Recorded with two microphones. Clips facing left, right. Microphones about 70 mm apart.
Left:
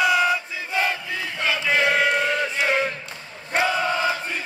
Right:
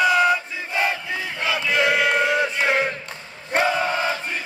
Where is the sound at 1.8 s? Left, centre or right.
Right.